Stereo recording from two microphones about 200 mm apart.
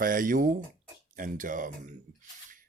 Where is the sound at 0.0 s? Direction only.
40° right (ahead or behind).